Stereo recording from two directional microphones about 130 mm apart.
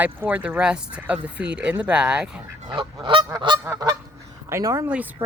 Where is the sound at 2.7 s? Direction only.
40° right (ahead or behind).